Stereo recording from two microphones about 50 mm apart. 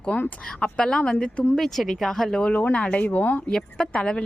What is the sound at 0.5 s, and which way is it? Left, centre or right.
Speech, left.